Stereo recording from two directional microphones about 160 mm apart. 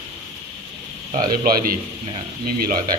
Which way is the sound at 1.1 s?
60° right (ahead or behind).